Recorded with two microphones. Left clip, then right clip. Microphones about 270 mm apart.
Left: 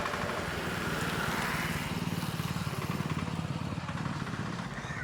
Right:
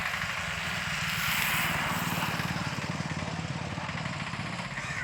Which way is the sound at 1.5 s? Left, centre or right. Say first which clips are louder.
Right 5 dB; centre.